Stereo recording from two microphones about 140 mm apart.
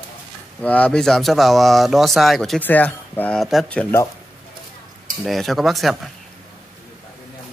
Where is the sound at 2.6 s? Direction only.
10° left (ahead or behind).